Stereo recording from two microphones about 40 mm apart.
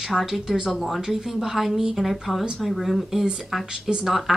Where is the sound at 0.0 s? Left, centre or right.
Centre.